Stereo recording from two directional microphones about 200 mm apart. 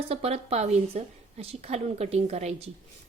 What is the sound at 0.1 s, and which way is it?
Speech, 30° right (ahead or behind).